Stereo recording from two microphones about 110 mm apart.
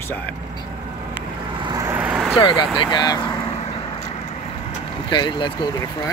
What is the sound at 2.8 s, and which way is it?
Speech, 40° left (ahead or behind).